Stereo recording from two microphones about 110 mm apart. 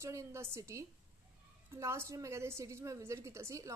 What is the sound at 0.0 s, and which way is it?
A woman's voice, 25° right (ahead or behind).